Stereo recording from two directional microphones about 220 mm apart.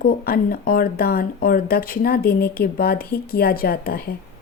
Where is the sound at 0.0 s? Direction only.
40° left (ahead or behind).